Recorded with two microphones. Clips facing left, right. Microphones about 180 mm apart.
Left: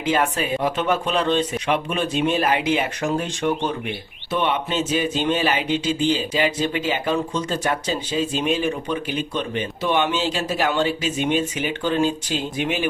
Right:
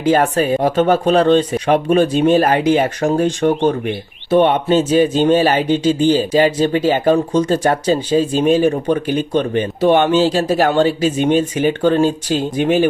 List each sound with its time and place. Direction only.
0.1 s speech: 40° right (ahead or behind)